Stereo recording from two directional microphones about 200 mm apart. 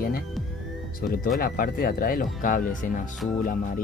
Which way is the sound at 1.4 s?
45° left (ahead or behind).